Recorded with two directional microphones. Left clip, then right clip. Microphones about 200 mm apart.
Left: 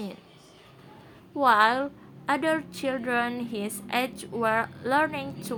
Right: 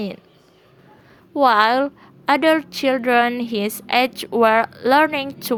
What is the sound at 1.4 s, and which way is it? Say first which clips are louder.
A woman's voice: right 6 dB; 45° right (ahead or behind).